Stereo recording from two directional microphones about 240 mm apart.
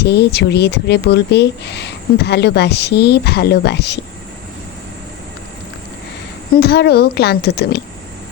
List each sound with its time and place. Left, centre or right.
0.0 s speech: left
6.6 s speech: left